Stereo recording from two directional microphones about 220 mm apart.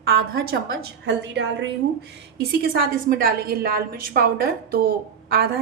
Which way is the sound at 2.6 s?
40° right (ahead or behind).